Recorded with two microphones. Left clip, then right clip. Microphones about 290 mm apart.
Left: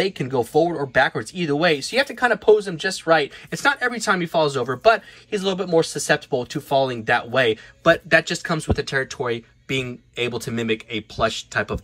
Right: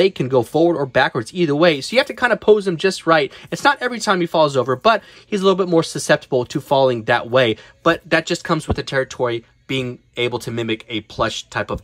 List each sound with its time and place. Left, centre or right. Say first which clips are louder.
0.0 s speech: right 6 dB; centre